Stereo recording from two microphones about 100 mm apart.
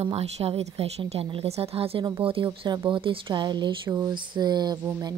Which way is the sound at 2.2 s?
60° right (ahead or behind).